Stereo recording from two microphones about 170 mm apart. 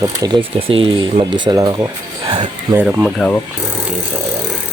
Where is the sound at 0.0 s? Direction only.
20° right (ahead or behind).